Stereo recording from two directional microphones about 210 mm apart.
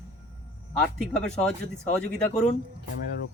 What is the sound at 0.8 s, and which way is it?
Speech, 5° left (ahead or behind).